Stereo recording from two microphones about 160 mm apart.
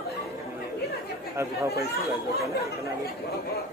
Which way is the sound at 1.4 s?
20° right (ahead or behind).